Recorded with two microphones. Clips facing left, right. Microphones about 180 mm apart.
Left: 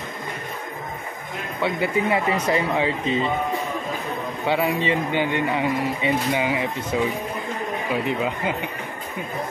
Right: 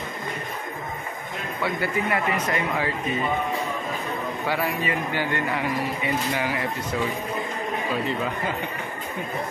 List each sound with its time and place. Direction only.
1.6 s speech: 25° left (ahead or behind)
4.5 s speech: 25° left (ahead or behind)
7.9 s speech: 15° left (ahead or behind)